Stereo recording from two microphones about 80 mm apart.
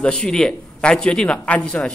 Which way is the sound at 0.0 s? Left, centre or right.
Centre.